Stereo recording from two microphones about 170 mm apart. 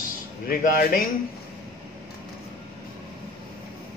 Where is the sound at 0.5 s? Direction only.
60° left (ahead or behind).